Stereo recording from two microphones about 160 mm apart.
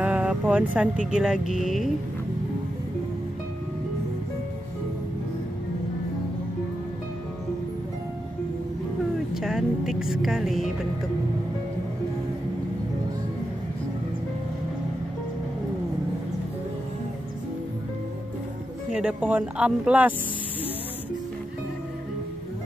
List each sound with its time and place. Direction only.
0.0 s vehicle: 5° right (ahead or behind)
1.1 s speech: 5° right (ahead or behind)
9.3 s music: 5° right (ahead or behind)
18.9 s speech: 5° right (ahead or behind)